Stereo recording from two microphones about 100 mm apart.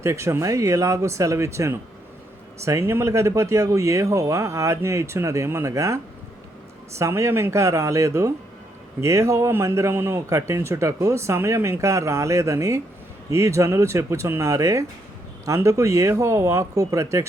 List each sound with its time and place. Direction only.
0.0 s speech: 30° right (ahead or behind)